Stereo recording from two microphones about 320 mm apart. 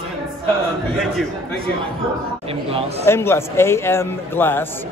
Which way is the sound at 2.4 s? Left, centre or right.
Centre.